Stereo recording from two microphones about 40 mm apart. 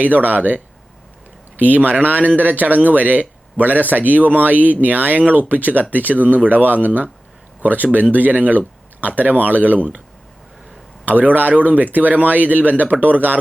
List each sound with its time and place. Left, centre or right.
0.0 s speech: right
11.0 s speech: right